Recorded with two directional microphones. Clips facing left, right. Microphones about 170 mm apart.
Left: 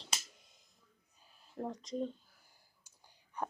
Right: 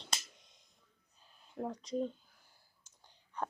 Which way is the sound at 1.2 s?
5° left (ahead or behind).